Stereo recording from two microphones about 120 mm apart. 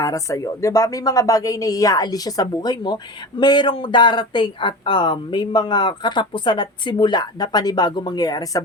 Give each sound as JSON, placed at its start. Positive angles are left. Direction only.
{"t": 0.0, "sound": "speech", "side_deg": 25}